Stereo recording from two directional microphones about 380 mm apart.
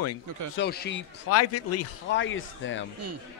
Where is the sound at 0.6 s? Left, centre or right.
Left.